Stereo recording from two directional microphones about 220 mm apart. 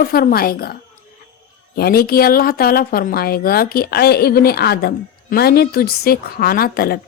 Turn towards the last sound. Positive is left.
turn(degrees=40)  # may be behind; listen again after turning